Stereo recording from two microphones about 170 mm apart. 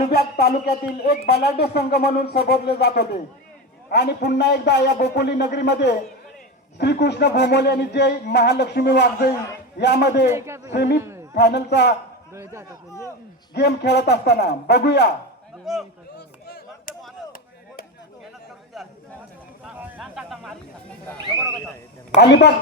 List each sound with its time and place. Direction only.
0.1 s music: 65° left (ahead or behind)
3.8 s speech: 80° left
10.3 s speech: 15° right (ahead or behind)
10.8 s music: 75° left (ahead or behind)
11.0 s a sound: 15° right (ahead or behind)
11.3 s speech: 80° left
12.3 s speech: 15° right (ahead or behind)
13.5 s speech: 80° left
15.6 s a man's voice: centre (ahead or behind)
19.6 s a sound: 5° right (ahead or behind)
22.2 s speech: 85° left